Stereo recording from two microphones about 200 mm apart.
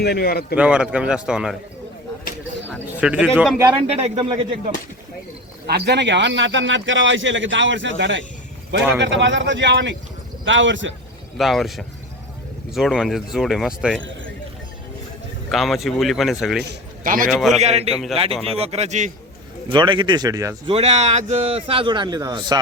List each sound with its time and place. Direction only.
0.0 s speech: 50° left (ahead or behind)
0.5 s speech: 5° right (ahead or behind)
2.9 s a man's voice: 5° right (ahead or behind)
3.8 s a man's voice: 30° right (ahead or behind)
5.6 s a man's voice: 55° right (ahead or behind)
11.3 s speech: centre (ahead or behind)
15.4 s speech: centre (ahead or behind)
17.0 s a man's voice: 45° right (ahead or behind)
17.2 s speech: centre (ahead or behind)
17.6 s a man's voice: 30° right (ahead or behind)
19.7 s a man's voice: 25° right (ahead or behind)
20.7 s a man's voice: 35° right (ahead or behind)